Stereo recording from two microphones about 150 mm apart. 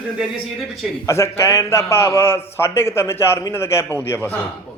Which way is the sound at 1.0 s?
20° left (ahead or behind).